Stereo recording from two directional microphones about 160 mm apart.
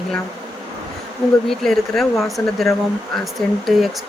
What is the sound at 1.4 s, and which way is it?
Speech, centre (ahead or behind).